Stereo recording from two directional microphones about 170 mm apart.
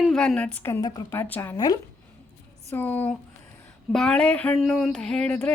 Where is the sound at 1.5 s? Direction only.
20° left (ahead or behind).